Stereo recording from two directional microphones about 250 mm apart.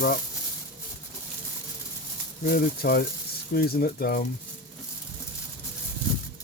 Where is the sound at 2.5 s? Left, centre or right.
Left.